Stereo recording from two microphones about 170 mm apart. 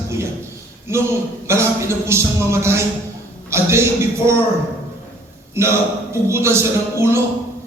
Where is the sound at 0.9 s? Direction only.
15° right (ahead or behind).